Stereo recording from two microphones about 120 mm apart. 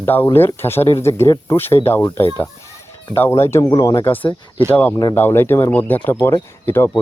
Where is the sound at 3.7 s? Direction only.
35° left (ahead or behind).